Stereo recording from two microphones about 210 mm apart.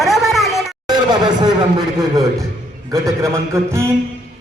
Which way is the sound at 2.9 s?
15° right (ahead or behind).